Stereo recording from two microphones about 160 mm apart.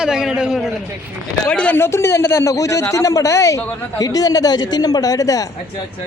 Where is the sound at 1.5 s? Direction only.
10° left (ahead or behind).